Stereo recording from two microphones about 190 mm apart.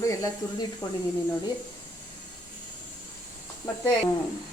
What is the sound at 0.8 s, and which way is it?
Speech, 20° left (ahead or behind).